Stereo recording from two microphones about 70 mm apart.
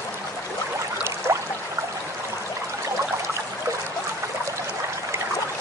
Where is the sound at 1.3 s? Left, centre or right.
Right.